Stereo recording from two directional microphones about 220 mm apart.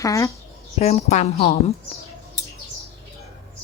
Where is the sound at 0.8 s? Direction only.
30° left (ahead or behind).